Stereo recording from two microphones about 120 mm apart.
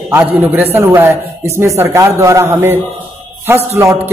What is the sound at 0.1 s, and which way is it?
A man's voice, 20° right (ahead or behind).